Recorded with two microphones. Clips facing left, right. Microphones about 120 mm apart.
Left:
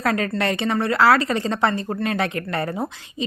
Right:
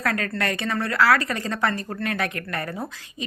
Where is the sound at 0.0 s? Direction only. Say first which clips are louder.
Left 4 dB; 25° left (ahead or behind).